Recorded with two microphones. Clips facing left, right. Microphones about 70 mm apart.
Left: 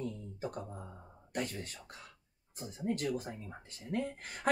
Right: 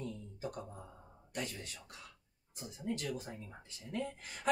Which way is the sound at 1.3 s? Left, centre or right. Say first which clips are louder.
Left 4 dB; left.